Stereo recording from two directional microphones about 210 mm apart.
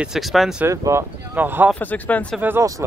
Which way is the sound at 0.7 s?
15° right (ahead or behind).